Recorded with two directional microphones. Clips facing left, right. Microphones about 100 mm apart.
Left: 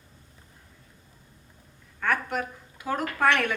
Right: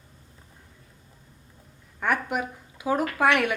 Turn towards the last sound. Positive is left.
turn(degrees=-10)  # may be behind; listen again after turning